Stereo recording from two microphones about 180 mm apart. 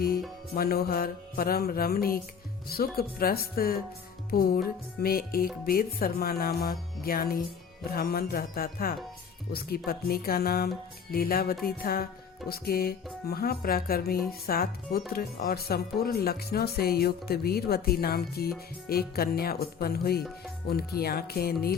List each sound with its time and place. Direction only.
0.5 s speech: 60° left (ahead or behind)